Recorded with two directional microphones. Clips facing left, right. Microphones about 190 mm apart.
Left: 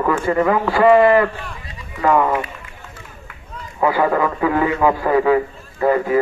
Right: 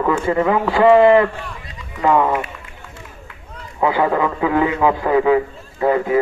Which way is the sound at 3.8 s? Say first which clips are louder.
Even; 20° right (ahead or behind).